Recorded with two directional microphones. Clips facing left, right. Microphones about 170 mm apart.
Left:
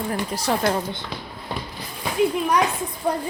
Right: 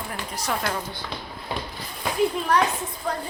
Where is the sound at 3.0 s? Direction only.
15° left (ahead or behind).